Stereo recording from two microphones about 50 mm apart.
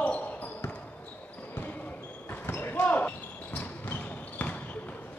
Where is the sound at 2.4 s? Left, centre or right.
Left.